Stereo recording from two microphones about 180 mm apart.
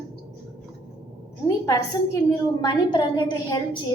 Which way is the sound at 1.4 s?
20° left (ahead or behind).